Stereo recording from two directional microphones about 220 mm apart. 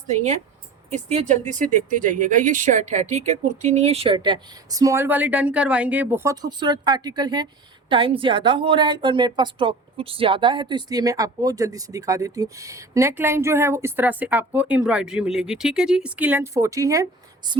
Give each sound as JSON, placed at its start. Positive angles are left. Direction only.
{"t": 0.9, "sound": "a woman's voice", "side_deg": -30}